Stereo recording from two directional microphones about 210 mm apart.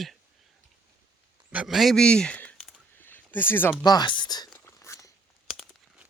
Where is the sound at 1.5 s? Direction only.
5° right (ahead or behind).